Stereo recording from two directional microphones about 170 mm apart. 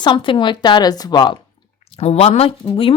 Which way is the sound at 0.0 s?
30° left (ahead or behind).